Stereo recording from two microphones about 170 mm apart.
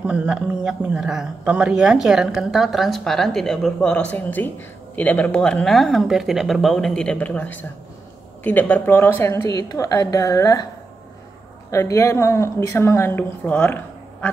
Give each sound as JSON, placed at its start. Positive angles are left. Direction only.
{"t": 0.0, "sound": "a woman's voice", "side_deg": -5}
{"t": 11.7, "sound": "a woman's voice", "side_deg": 15}